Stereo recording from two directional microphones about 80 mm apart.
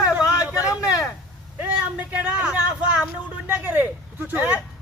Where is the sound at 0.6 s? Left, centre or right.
Left.